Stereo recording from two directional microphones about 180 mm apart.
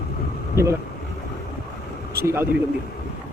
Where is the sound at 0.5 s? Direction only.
15° right (ahead or behind).